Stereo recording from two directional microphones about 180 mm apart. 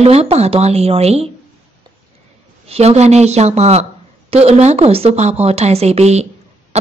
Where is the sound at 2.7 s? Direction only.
35° right (ahead or behind).